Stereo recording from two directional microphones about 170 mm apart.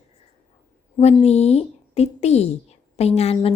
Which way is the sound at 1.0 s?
40° left (ahead or behind).